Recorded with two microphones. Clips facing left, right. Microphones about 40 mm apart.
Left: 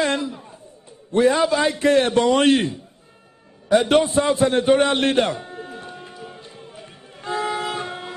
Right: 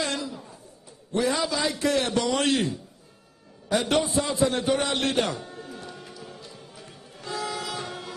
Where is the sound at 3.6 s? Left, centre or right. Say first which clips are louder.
Left 8 dB; left.